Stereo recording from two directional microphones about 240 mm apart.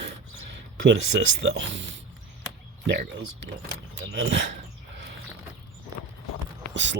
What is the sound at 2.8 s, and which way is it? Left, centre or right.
Speech, right.